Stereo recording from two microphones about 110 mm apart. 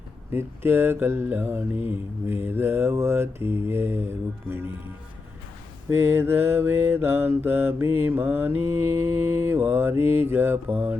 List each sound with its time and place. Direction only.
0.3 s mantra: 20° right (ahead or behind)
5.9 s mantra: 20° right (ahead or behind)